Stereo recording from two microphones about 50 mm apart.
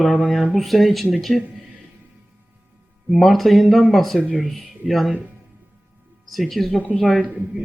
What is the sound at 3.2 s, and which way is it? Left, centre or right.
Speech, centre.